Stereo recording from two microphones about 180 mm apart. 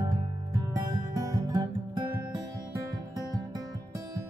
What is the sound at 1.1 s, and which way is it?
Music, 20° right (ahead or behind).